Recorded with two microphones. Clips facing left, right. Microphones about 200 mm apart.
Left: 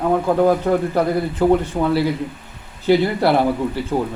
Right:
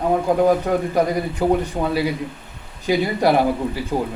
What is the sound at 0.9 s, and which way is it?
Speech, 15° right (ahead or behind).